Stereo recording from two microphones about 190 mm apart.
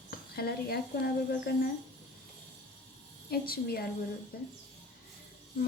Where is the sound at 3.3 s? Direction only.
55° left (ahead or behind).